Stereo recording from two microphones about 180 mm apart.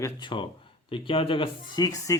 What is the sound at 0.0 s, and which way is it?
Speech, 25° left (ahead or behind).